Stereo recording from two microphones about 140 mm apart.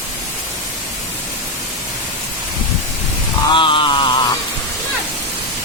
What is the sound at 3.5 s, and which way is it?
Music, 35° left (ahead or behind).